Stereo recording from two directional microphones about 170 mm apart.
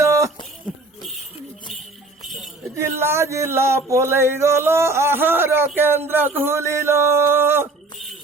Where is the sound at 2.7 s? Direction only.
15° right (ahead or behind).